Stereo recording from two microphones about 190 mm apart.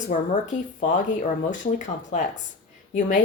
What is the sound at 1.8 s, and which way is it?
Speech, 35° left (ahead or behind).